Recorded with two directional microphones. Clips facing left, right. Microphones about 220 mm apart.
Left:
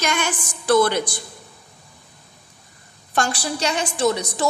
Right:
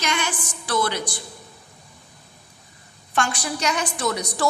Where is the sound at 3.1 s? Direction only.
35° left (ahead or behind).